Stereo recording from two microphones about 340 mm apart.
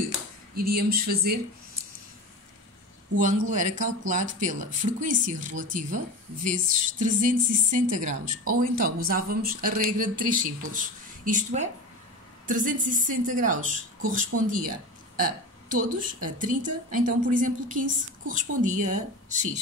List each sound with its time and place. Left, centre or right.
0.7 s speech: right
3.2 s speech: right
15.7 s speech: right